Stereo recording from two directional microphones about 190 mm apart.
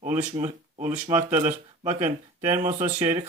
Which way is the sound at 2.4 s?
10° right (ahead or behind).